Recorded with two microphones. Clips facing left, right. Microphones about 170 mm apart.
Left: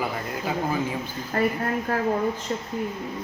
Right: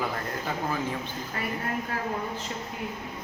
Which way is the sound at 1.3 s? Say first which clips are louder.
Left 12 dB; 50° left (ahead or behind).